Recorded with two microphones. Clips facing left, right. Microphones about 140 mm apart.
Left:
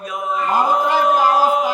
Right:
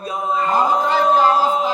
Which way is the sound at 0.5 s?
10° left (ahead or behind).